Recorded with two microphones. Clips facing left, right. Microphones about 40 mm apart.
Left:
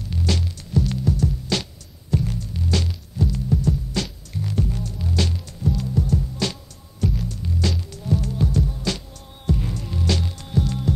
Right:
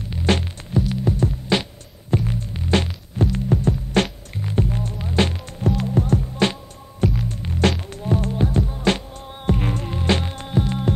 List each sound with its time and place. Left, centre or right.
0.1 s music: right
9.5 s hum: right